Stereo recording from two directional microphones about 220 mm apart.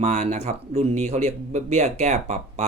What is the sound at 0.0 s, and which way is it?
Speech, 30° right (ahead or behind).